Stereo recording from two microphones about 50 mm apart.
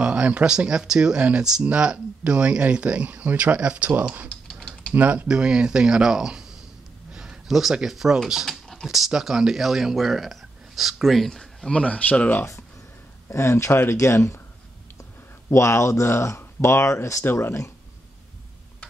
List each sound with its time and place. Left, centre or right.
0.0 s speech: right
4.5 s typing: centre
4.9 s speech: right
5.3 s speech: centre
7.1 s a sound: centre
7.7 s speech: centre
8.5 s a sound: centre
8.8 s speech: centre
11.7 s speech: left
13.3 s speech: left
15.5 s speech: left
17.2 s speech: left